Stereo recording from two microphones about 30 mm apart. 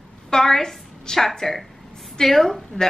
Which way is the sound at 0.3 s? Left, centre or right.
Centre.